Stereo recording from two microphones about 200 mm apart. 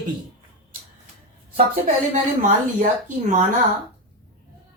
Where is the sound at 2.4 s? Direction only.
40° right (ahead or behind).